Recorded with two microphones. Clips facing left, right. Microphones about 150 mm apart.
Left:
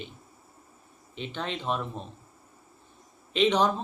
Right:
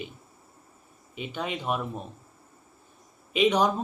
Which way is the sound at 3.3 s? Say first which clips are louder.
Right 1 dB; 10° right (ahead or behind).